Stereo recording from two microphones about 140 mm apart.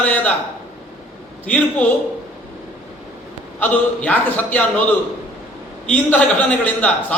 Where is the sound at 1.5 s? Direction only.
10° left (ahead or behind).